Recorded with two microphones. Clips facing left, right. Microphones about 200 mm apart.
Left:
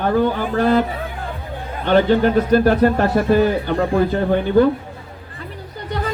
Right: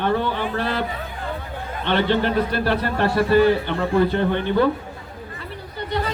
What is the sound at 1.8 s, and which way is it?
A man's voice, 40° left (ahead or behind).